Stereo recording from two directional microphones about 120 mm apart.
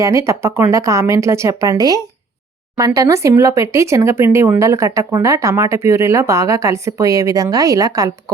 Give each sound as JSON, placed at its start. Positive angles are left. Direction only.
{"t": 0.0, "sound": "speech", "side_deg": -25}